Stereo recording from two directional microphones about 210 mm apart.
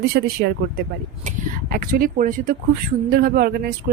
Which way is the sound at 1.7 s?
45° right (ahead or behind).